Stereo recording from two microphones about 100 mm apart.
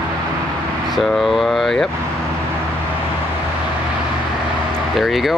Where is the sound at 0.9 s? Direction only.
Centre (ahead or behind).